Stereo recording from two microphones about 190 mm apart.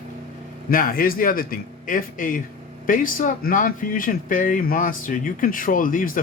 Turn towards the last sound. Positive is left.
turn(degrees=45)  # may be behind; listen again after turning